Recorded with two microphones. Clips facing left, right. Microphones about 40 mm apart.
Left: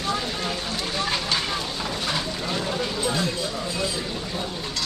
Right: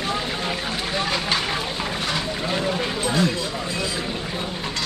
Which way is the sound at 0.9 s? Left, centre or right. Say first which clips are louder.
Right 2 dB; right.